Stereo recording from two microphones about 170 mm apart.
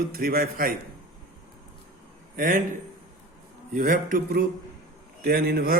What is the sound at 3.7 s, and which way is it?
A man's voice, 50° right (ahead or behind).